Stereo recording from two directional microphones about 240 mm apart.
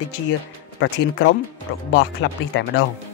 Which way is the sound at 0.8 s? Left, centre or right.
Left.